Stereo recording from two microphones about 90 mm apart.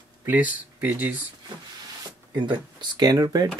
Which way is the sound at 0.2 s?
20° right (ahead or behind).